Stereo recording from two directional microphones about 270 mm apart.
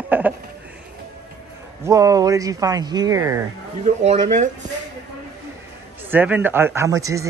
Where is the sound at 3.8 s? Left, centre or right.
Right.